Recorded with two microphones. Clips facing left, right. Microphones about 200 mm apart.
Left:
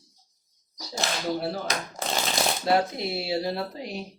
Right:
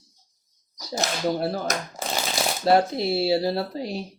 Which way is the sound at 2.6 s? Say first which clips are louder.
Right 6 dB; 35° right (ahead or behind).